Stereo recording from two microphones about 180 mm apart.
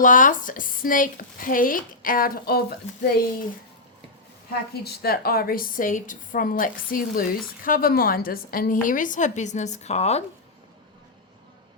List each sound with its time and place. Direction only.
0.0 s a woman's voice: 45° left (ahead or behind)
4.7 s a woman's voice: 60° left (ahead or behind); by 10.2 s 35° left (ahead or behind)